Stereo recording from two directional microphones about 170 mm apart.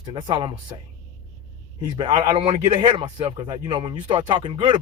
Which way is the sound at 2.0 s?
30° right (ahead or behind).